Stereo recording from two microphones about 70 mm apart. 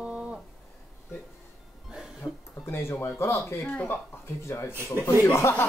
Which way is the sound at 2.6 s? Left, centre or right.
Left.